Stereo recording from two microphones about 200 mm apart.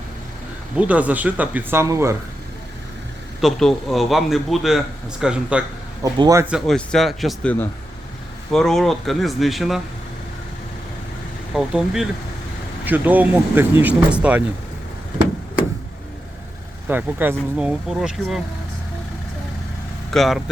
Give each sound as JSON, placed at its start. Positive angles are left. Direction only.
{"t": 0.8, "sound": "speech", "side_deg": -5}
{"t": 3.4, "sound": "speech", "side_deg": 0}
{"t": 6.1, "sound": "speech", "side_deg": -20}
{"t": 6.5, "sound": "speech", "side_deg": 0}
{"t": 11.5, "sound": "speech", "side_deg": 0}
{"t": 16.9, "sound": "speech", "side_deg": -10}
{"t": 20.1, "sound": "speech", "side_deg": 0}